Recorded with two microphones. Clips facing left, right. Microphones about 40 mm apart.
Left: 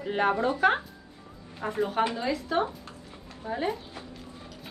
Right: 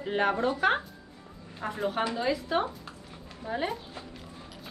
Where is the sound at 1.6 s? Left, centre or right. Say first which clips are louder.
Left 2 dB; centre.